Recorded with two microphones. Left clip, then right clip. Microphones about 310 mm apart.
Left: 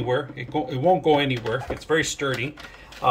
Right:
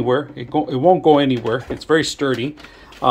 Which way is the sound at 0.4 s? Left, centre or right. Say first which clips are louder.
Right 7 dB; centre.